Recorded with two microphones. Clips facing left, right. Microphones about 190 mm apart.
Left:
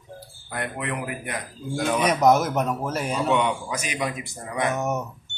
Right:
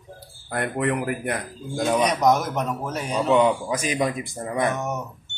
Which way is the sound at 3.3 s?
35° right (ahead or behind).